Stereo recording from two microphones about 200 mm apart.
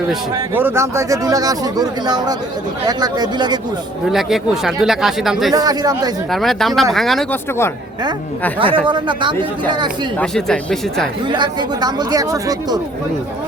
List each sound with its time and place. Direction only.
0.3 s speech: 10° right (ahead or behind)
4.1 s speech: centre (ahead or behind)
5.5 s speech: 20° right (ahead or behind)
6.3 s speech: centre (ahead or behind)
8.5 s speech: 25° right (ahead or behind)
10.2 s speech: 5° left (ahead or behind)
11.3 s speech: 20° right (ahead or behind)